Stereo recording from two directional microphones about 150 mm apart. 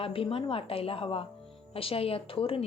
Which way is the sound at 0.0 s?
35° left (ahead or behind).